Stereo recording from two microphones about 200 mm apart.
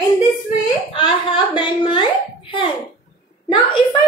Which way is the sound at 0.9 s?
25° left (ahead or behind).